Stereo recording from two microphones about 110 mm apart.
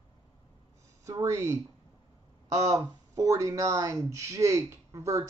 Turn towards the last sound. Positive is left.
turn(degrees=-30)  # may be behind; listen again after turning